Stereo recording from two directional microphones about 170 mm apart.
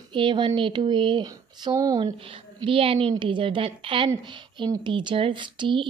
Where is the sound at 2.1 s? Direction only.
30° right (ahead or behind).